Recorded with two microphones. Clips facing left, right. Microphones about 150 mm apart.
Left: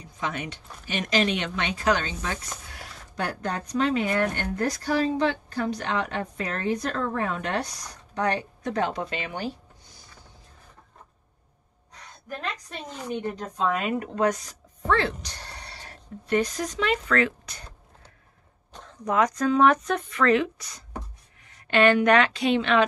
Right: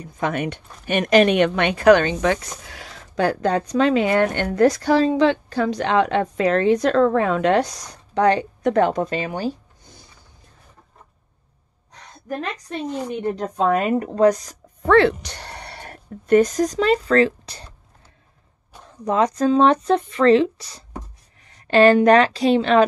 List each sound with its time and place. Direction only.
0.0 s speech: 55° right (ahead or behind); by 9.5 s 35° right (ahead or behind)
13.4 s speech: 55° right (ahead or behind); by 14.6 s 40° right (ahead or behind)
14.9 s speech: 70° right (ahead or behind); by 17.6 s 30° right (ahead or behind)
19.0 s a woman's voice: 30° right (ahead or behind)